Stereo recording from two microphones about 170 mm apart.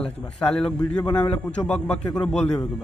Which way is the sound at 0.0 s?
5° left (ahead or behind).